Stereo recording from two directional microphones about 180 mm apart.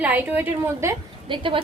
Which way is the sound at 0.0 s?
10° right (ahead or behind).